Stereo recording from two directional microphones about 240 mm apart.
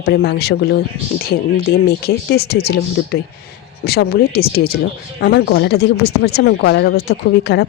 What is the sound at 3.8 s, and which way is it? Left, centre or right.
A woman's voice, left.